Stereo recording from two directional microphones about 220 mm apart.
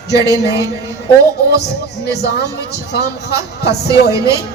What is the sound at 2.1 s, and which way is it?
A man's voice, 50° left (ahead or behind).